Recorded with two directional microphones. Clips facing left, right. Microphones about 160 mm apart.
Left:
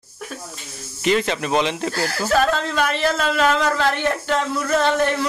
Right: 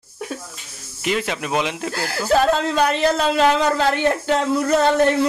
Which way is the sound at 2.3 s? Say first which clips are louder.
Right 3 dB; 35° right (ahead or behind).